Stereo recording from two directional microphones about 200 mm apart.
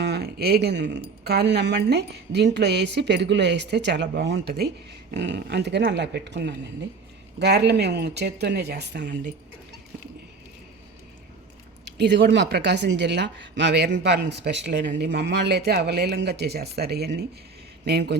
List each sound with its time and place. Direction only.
0.0 s speech: 55° right (ahead or behind)
11.9 s speech: 60° right (ahead or behind)